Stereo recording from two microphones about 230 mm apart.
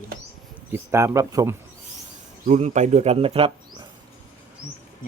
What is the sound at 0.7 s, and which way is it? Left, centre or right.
Speech, centre.